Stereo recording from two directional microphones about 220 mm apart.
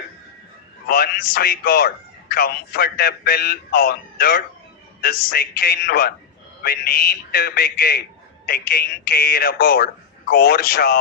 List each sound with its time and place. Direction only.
0.9 s a man's voice: 45° left (ahead or behind)